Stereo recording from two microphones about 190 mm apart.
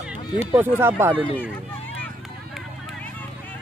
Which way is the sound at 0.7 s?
10° right (ahead or behind).